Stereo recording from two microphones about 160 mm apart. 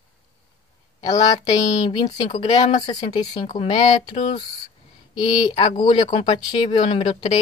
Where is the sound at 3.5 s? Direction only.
40° left (ahead or behind).